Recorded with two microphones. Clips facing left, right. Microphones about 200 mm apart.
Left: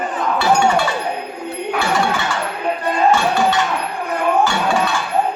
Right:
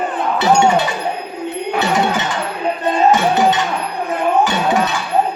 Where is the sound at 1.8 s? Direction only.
20° right (ahead or behind).